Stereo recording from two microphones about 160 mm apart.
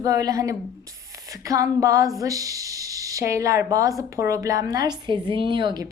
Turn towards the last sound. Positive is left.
turn(degrees=-30)  # may be behind; listen again after turning